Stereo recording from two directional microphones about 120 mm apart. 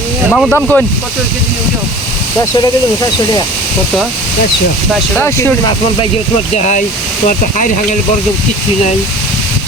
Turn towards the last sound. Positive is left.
turn(degrees=90)